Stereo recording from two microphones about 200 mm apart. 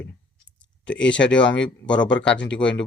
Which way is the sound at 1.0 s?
65° left (ahead or behind).